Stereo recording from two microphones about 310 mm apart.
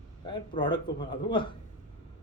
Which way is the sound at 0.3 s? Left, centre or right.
Centre.